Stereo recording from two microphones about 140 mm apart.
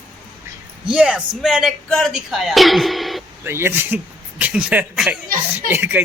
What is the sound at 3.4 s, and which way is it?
A man's voice, 15° right (ahead or behind).